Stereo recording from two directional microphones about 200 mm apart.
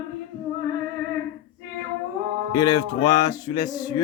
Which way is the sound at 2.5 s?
20° left (ahead or behind).